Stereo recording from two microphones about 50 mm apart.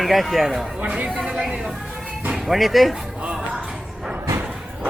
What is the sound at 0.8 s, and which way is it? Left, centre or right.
Speech, right.